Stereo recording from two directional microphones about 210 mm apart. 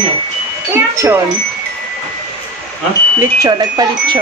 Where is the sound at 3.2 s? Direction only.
20° right (ahead or behind).